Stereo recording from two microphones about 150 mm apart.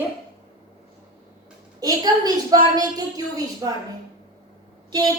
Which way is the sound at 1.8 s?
25° right (ahead or behind).